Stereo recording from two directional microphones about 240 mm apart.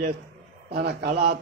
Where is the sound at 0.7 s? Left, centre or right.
Right.